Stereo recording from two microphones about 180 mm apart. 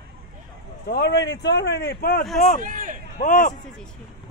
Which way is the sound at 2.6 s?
45° right (ahead or behind).